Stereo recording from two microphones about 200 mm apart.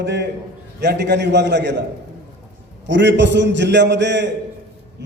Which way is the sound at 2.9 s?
60° right (ahead or behind).